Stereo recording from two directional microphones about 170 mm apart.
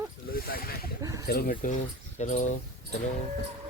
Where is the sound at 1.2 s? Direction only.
60° left (ahead or behind).